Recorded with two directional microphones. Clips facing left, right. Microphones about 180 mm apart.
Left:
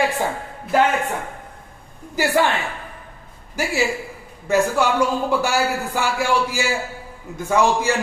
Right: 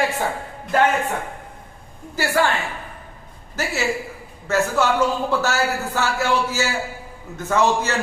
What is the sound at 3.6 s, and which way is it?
A man's voice, 10° left (ahead or behind).